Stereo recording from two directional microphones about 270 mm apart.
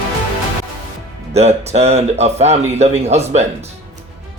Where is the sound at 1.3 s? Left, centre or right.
Right.